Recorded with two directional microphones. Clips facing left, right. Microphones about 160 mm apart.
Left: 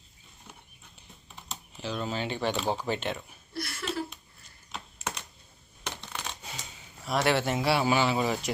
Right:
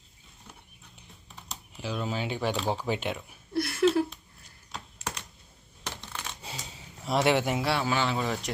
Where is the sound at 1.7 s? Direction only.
10° right (ahead or behind).